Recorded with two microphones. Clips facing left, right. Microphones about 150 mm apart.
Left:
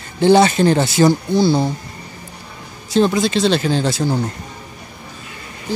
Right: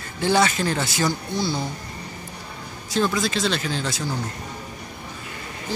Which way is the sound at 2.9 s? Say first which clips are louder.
Left 7 dB; 25° left (ahead or behind).